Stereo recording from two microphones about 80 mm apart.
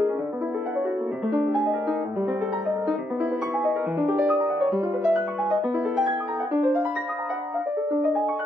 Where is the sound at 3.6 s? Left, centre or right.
Centre.